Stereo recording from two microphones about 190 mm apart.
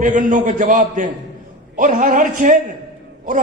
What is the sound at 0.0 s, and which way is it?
A man's voice, 45° right (ahead or behind).